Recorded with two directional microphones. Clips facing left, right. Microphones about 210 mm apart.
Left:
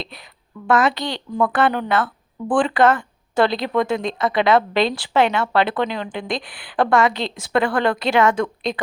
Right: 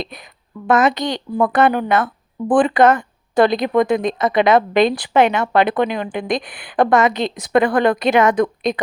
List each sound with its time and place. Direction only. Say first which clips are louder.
0.0 s a woman's voice: right 5 dB; 20° right (ahead or behind)